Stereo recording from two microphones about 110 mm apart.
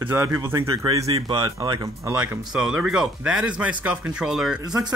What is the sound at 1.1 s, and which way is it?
Speech, 50° right (ahead or behind).